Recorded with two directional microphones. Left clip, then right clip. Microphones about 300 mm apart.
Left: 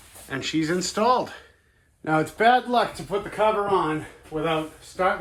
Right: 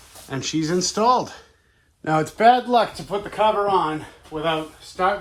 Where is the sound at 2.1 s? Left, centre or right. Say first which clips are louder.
Right 3 dB; right.